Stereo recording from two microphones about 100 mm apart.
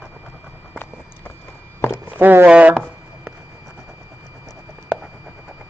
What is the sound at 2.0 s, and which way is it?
Speech, 20° right (ahead or behind).